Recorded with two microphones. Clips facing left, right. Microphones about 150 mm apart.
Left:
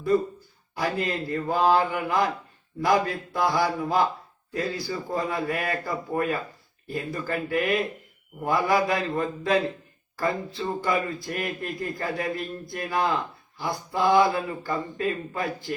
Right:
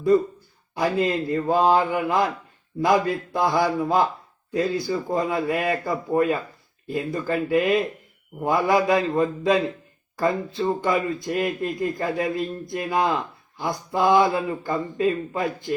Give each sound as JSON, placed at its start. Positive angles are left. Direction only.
{"t": 0.8, "sound": "speech", "side_deg": -20}